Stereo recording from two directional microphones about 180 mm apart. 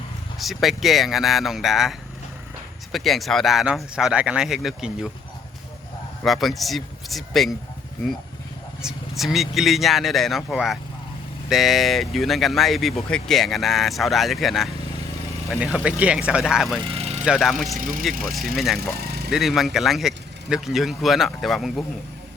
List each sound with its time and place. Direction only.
0.3 s speech: centre (ahead or behind)
6.2 s speech: centre (ahead or behind)
8.8 s speech: centre (ahead or behind)
16.8 s vehicle: 35° right (ahead or behind)
17.2 s speech: centre (ahead or behind)
17.7 s speech: 50° right (ahead or behind)
18.3 s speech: centre (ahead or behind)
18.8 s a sound: 60° right (ahead or behind)
19.3 s speech: centre (ahead or behind)